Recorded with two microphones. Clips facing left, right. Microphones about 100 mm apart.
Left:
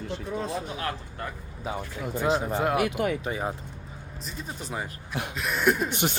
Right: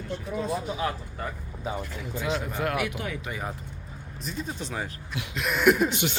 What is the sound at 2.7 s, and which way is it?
Speech, 45° left (ahead or behind).